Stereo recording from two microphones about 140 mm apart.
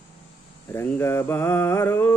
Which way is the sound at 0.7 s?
20° left (ahead or behind).